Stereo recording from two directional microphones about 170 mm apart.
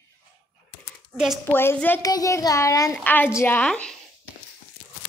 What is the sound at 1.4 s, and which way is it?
A child's voice, 10° left (ahead or behind).